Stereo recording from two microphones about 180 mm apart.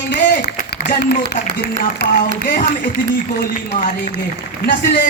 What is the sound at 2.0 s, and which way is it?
Speech, 65° left (ahead or behind).